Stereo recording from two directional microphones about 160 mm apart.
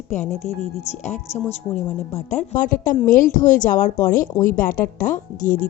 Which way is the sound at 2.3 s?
55° left (ahead or behind).